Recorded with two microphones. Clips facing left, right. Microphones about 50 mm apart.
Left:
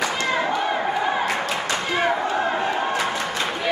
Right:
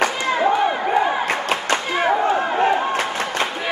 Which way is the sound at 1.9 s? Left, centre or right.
Centre.